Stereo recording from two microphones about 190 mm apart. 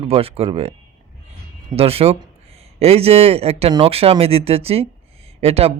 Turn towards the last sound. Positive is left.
turn(degrees=-30)  # may be behind; listen again after turning